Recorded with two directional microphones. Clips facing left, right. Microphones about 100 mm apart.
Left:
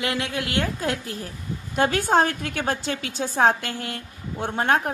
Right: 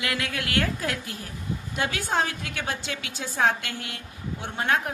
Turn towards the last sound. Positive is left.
turn(degrees=40)  # may be behind; listen again after turning